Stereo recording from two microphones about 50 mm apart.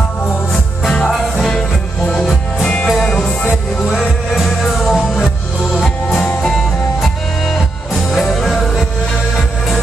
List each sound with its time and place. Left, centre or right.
0.9 s music: centre
2.6 s music: centre
4.4 s music: centre
7.0 s music: centre